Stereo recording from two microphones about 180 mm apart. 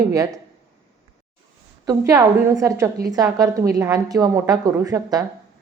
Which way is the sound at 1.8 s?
20° right (ahead or behind).